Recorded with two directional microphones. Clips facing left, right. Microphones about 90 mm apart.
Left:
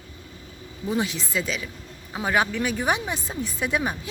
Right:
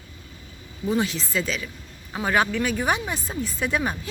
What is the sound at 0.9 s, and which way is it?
Speech, 15° left (ahead or behind).